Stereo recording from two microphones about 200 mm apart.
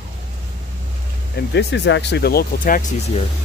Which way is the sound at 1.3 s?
55° left (ahead or behind).